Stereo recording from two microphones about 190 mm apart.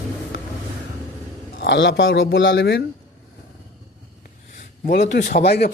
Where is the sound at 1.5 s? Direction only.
65° left (ahead or behind).